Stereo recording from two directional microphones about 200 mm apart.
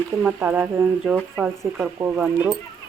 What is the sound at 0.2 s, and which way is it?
Speech, 10° right (ahead or behind).